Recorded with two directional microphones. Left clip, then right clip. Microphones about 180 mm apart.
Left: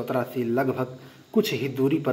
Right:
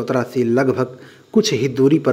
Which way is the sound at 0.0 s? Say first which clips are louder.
Right 8 dB; 35° right (ahead or behind).